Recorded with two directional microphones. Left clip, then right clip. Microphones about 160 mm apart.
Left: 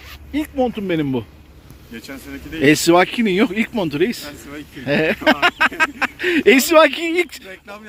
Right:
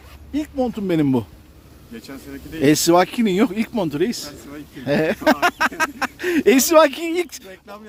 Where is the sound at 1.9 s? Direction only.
5° right (ahead or behind).